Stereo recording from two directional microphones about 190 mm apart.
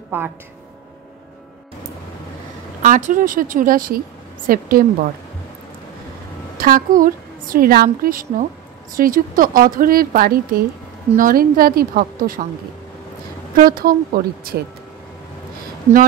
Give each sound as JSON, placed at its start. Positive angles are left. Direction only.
{"t": 0.1, "sound": "speech", "side_deg": -10}
{"t": 2.8, "sound": "a woman's voice", "side_deg": -45}
{"t": 6.6, "sound": "a woman's voice", "side_deg": -45}
{"t": 13.6, "sound": "a woman's voice", "side_deg": -50}